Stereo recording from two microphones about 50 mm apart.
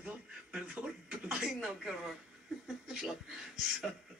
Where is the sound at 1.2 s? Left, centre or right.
Centre.